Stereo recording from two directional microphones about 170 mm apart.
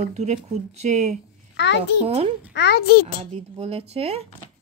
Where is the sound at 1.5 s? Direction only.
90° left.